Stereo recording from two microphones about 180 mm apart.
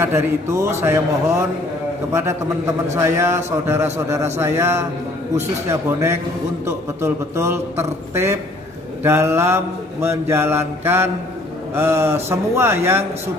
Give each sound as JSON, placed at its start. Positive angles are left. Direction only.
{"t": 0.0, "sound": "a man's voice", "side_deg": -15}
{"t": 2.9, "sound": "a man's voice", "side_deg": -15}